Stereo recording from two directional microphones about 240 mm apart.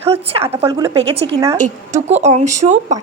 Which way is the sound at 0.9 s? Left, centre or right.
Right.